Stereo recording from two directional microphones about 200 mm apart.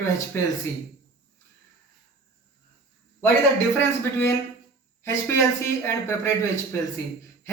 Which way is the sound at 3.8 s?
15° left (ahead or behind).